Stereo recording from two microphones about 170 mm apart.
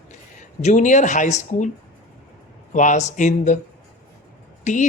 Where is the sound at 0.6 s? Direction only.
45° left (ahead or behind).